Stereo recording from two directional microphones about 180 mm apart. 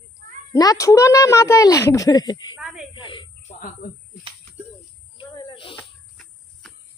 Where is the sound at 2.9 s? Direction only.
25° left (ahead or behind).